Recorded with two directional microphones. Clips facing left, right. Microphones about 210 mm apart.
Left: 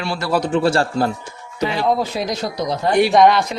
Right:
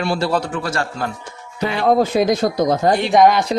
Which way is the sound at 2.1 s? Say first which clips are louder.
Right 7 dB; 50° right (ahead or behind).